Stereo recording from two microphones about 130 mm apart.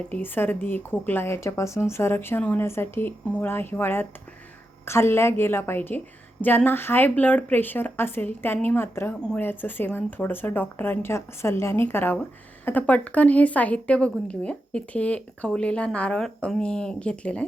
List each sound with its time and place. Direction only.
0.1 s a woman's voice: 15° left (ahead or behind)